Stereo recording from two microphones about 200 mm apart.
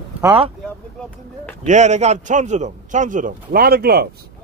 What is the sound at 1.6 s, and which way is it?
A man's voice, 35° right (ahead or behind).